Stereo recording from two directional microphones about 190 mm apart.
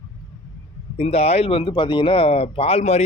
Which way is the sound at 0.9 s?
35° left (ahead or behind).